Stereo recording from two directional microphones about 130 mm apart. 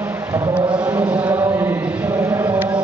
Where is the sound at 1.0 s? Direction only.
10° right (ahead or behind).